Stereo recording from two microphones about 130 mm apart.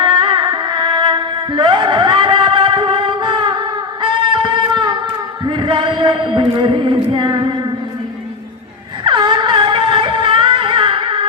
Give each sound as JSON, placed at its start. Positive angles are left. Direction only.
{"t": 0.0, "sound": "music", "side_deg": -40}
{"t": 7.2, "sound": "female singing", "side_deg": -35}
{"t": 9.0, "sound": "music", "side_deg": -35}